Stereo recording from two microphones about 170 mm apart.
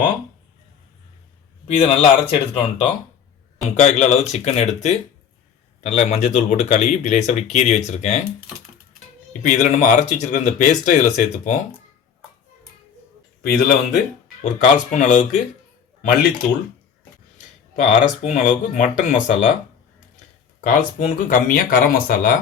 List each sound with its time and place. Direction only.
1.7 s speech: 35° left (ahead or behind)
9.4 s speech: 45° left (ahead or behind)
13.4 s a man's voice: 60° left (ahead or behind)
14.4 s speech: 50° left (ahead or behind)
17.8 s speech: 45° left (ahead or behind)
20.7 s speech: 50° left (ahead or behind)